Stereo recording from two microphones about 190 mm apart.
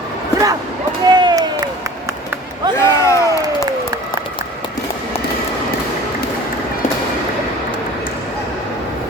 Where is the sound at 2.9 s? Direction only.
15° left (ahead or behind).